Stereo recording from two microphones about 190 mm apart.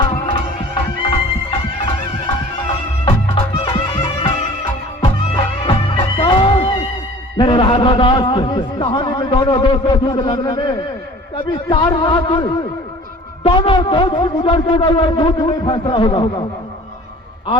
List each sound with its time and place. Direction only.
0.1 s music: 30° left (ahead or behind)
7.3 s a man's voice: 25° left (ahead or behind)
11.7 s a man's voice: 20° left (ahead or behind)